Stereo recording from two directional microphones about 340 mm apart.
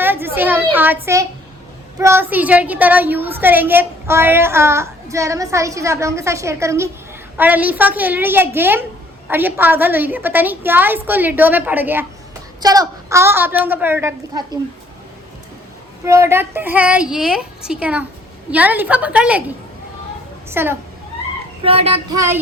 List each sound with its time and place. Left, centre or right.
0.0 s a child's voice: centre
16.0 s a woman's voice: centre
20.5 s a woman's voice: centre
21.6 s a woman's voice: centre